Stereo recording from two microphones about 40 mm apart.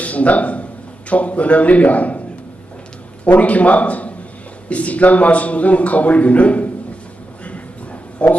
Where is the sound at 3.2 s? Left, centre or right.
Left.